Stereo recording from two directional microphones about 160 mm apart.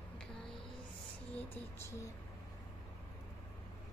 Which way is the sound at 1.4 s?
15° left (ahead or behind).